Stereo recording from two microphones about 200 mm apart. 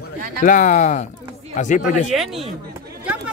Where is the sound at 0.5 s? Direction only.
40° left (ahead or behind).